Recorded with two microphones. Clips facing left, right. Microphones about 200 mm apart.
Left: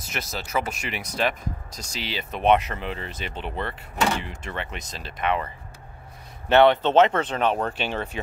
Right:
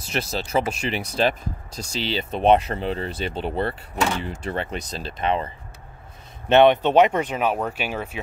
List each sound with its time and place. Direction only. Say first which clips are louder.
0.0 s speech: right 6 dB; 30° right (ahead or behind)
6.5 s speech: right 2 dB; 15° right (ahead or behind)